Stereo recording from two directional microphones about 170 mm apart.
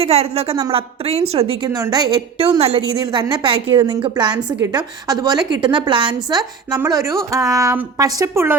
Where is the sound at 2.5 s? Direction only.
35° right (ahead or behind).